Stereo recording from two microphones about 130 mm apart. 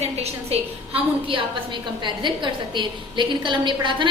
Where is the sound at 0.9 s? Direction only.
40° right (ahead or behind).